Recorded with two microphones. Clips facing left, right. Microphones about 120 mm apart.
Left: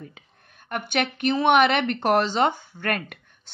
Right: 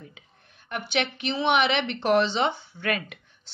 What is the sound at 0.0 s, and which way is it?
Speech, 50° left (ahead or behind).